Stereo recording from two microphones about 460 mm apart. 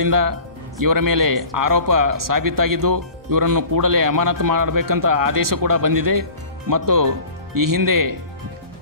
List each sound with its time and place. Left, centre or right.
0.0 s speech: right